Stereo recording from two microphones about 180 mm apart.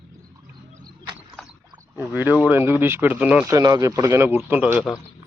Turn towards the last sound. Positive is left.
turn(degrees=-10)  # may be behind; listen again after turning